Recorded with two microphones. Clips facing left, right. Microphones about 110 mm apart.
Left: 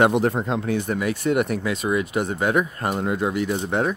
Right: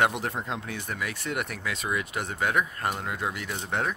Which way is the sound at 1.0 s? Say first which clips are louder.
Left 8 dB; 20° left (ahead or behind).